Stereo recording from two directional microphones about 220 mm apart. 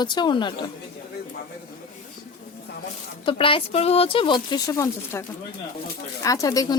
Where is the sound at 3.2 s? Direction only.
25° left (ahead or behind).